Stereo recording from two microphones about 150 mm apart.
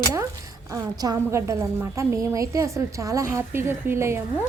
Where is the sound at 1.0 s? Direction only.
20° right (ahead or behind).